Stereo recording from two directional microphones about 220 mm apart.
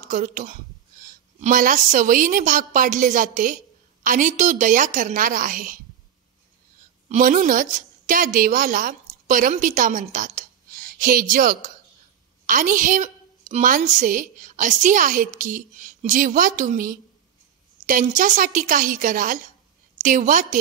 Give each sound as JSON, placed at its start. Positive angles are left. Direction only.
{"t": 0.0, "sound": "a woman's voice", "side_deg": -35}
{"t": 7.1, "sound": "a woman's voice", "side_deg": -35}